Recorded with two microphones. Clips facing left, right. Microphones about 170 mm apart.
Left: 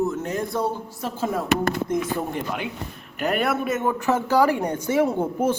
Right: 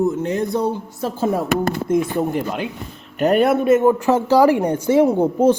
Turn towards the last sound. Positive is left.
turn(degrees=-20)  # may be behind; listen again after turning